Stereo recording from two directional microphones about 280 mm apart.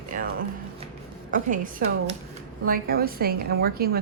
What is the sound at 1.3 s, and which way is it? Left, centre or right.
A woman's voice, right.